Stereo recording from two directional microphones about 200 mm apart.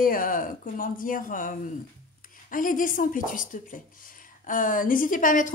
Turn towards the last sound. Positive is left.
turn(degrees=40)  # may be behind; listen again after turning